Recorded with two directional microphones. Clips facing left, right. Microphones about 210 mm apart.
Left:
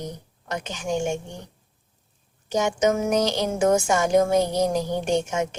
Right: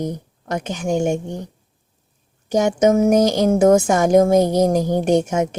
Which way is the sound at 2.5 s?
50° right (ahead or behind).